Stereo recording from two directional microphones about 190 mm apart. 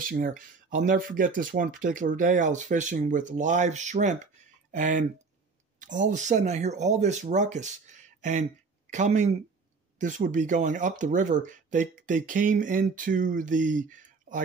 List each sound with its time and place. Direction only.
0.1 s speech: 45° right (ahead or behind)